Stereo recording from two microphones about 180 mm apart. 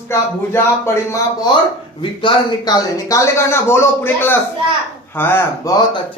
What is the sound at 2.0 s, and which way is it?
Speech, 30° left (ahead or behind).